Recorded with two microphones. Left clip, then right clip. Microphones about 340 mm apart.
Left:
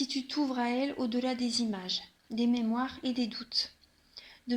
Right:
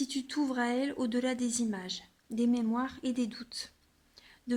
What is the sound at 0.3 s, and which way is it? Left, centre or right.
Speech, right.